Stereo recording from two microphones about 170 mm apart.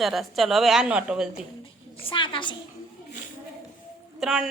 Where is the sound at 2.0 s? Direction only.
30° left (ahead or behind).